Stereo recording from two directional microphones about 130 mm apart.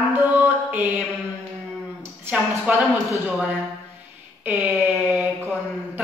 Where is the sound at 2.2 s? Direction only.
15° right (ahead or behind).